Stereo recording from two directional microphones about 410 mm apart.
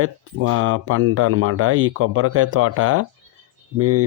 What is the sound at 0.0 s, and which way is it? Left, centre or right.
Speech, right.